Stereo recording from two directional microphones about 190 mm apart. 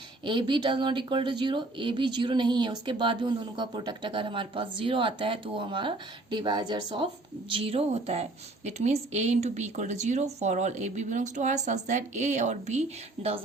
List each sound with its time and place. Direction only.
0.3 s speech: 25° right (ahead or behind)